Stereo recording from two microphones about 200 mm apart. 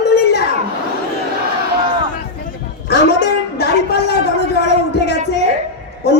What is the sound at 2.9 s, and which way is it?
A man's voice, 55° left (ahead or behind).